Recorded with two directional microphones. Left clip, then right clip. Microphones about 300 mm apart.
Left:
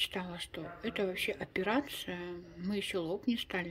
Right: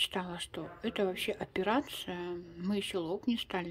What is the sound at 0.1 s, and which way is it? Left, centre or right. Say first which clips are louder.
Speech: right 2 dB; centre.